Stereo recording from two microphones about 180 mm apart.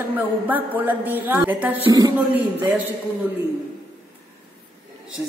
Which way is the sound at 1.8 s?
20° right (ahead or behind).